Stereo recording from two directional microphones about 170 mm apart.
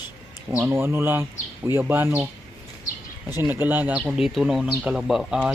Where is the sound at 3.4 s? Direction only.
10° right (ahead or behind).